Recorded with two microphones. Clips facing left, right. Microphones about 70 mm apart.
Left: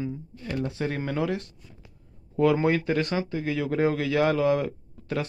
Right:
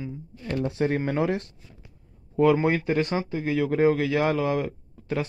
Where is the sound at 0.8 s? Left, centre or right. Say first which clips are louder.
Right 4 dB; right.